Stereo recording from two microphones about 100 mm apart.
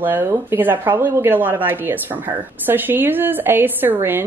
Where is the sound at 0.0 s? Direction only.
20° right (ahead or behind).